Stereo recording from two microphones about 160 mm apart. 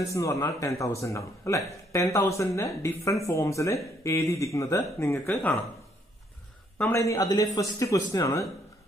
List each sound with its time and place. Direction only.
0.0 s speech: 20° left (ahead or behind)
6.8 s speech: 15° left (ahead or behind)